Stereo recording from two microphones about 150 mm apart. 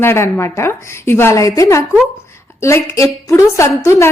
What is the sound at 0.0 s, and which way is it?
A woman's voice, 15° left (ahead or behind).